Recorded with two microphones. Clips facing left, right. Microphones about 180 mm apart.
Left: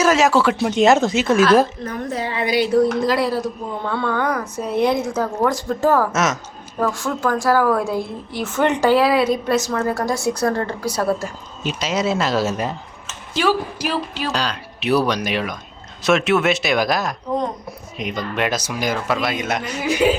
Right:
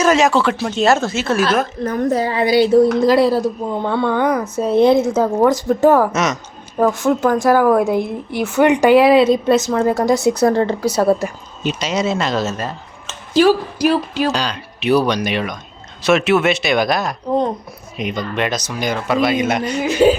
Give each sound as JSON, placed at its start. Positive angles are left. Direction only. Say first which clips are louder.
{"t": 0.0, "sound": "speech", "louder": "right 1 dB", "side_deg": 5}
{"t": 1.8, "sound": "a woman's voice", "louder": "right 8 dB", "side_deg": -40}
{"t": 11.6, "sound": "speech", "louder": "right 2 dB", "side_deg": 0}
{"t": 13.1, "sound": "speech", "louder": "right 7 dB", "side_deg": -40}
{"t": 14.3, "sound": "speech", "louder": "right 2 dB", "side_deg": 0}
{"t": 20.0, "sound": "a woman's voice", "louder": "right 5 dB", "side_deg": -30}